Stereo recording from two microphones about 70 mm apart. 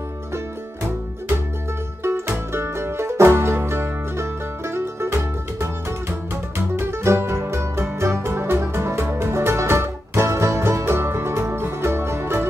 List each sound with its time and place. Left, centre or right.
2.0 s music: right
6.8 s music: right